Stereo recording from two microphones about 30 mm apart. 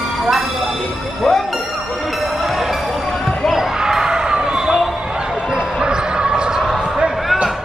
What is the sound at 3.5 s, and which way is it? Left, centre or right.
Basketball bounce, centre.